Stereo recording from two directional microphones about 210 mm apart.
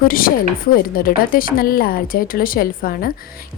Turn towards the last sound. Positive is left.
turn(degrees=45)  # may be behind; listen again after turning